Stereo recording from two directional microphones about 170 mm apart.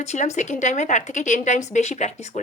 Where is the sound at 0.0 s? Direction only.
40° left (ahead or behind).